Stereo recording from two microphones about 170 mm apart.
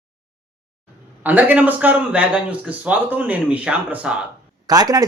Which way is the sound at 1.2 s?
10° right (ahead or behind).